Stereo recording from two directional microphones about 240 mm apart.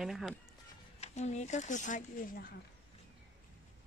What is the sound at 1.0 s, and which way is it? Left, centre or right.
Speech, left.